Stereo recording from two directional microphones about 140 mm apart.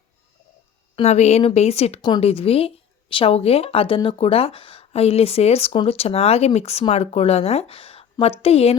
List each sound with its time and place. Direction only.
1.0 s a woman's voice: 50° left (ahead or behind)
2.0 s speech: 30° left (ahead or behind)
2.2 s a woman's voice: 45° left (ahead or behind)